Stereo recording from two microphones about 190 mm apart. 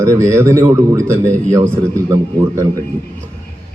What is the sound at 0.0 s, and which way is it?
A man's voice, 15° right (ahead or behind).